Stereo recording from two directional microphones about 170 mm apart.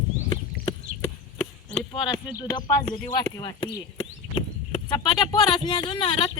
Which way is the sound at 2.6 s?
20° left (ahead or behind).